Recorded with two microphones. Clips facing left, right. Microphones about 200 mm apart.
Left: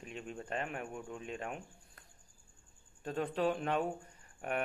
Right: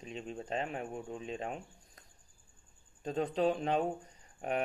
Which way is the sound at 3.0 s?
25° right (ahead or behind).